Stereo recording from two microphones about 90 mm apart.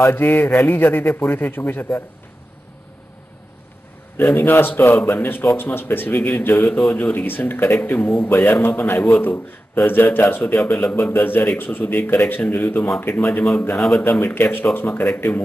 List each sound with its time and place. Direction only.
0.0 s a man's voice: 25° left (ahead or behind)
4.2 s a man's voice: 20° left (ahead or behind)
13.7 s speech: 5° left (ahead or behind)
14.2 s a man's voice: 25° left (ahead or behind)